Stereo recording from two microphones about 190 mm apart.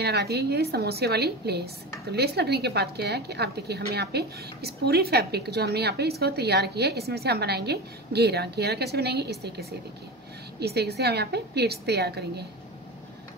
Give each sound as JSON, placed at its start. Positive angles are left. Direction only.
{"t": 0.0, "sound": "a woman's voice", "side_deg": -60}